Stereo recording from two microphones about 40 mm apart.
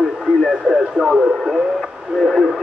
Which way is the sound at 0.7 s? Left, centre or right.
Centre.